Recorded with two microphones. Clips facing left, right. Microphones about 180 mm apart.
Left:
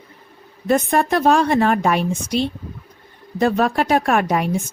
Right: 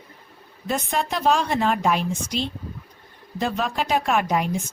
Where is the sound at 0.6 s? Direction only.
55° left (ahead or behind).